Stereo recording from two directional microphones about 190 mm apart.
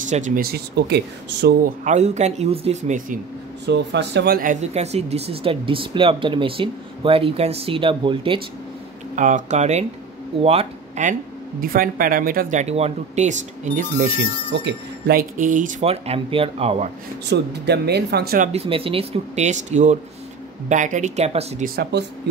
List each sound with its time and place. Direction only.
0.0 s speech: 40° right (ahead or behind); by 1.7 s 60° right (ahead or behind)
1.9 s speech: 35° right (ahead or behind)
3.6 s speech: 65° right (ahead or behind); by 8.4 s 25° right (ahead or behind)
9.1 s speech: 40° right (ahead or behind)
11.6 s speech: 50° right (ahead or behind)
14.5 s speech: 65° right (ahead or behind); by 16.9 s 30° right (ahead or behind)
17.3 s speech: 60° right (ahead or behind)
18.5 s speech: 30° right (ahead or behind)
21.9 s speech: 65° right (ahead or behind)